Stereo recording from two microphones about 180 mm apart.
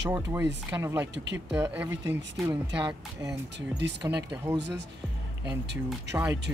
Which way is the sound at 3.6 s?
75° right (ahead or behind).